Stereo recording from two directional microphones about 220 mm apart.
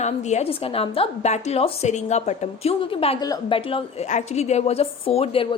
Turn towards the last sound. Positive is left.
turn(degrees=25)  # may be behind; listen again after turning